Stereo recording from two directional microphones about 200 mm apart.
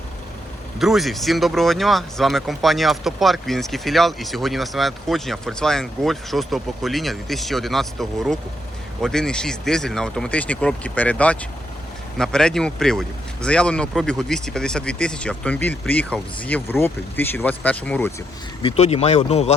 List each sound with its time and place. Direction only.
0.8 s speech: centre (ahead or behind)
18.6 s speech: 30° left (ahead or behind)